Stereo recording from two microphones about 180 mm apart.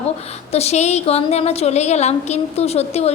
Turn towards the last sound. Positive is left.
turn(degrees=35)  # may be behind; listen again after turning